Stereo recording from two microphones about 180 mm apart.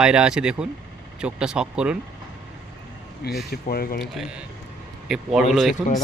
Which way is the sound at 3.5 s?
55° left (ahead or behind).